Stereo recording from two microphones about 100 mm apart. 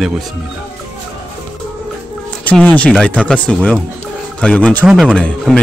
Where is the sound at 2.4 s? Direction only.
15° left (ahead or behind).